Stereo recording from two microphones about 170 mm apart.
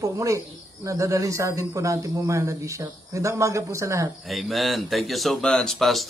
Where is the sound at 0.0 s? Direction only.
20° right (ahead or behind).